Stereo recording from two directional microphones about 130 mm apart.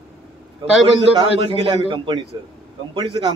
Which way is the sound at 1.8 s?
35° right (ahead or behind).